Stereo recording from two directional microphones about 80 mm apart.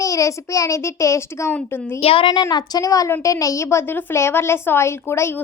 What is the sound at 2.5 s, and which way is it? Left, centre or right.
A woman's voice, left.